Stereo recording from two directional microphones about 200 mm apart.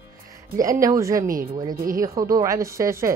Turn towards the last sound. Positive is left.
turn(degrees=-15)  # may be behind; listen again after turning